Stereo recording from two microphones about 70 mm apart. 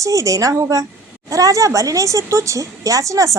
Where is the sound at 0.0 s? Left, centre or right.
Right.